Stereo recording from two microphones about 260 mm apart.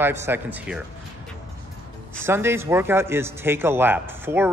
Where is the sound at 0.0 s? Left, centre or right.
Centre.